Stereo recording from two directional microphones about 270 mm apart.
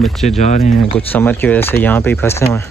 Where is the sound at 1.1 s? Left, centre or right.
Centre.